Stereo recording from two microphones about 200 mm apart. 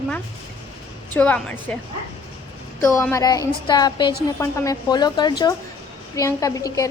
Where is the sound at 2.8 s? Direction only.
15° left (ahead or behind).